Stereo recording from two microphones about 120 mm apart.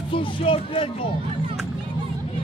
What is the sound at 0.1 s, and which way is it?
Speech, 50° left (ahead or behind).